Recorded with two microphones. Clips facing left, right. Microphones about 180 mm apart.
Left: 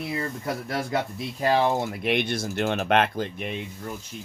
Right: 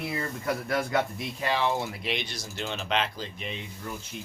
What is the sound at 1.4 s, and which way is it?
Speech, 40° left (ahead or behind).